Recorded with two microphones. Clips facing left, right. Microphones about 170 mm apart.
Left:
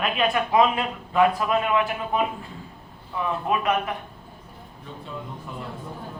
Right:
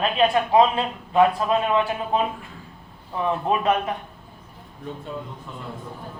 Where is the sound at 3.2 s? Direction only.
30° right (ahead or behind).